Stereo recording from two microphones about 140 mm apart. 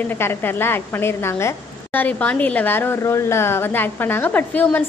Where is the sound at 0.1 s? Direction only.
15° left (ahead or behind).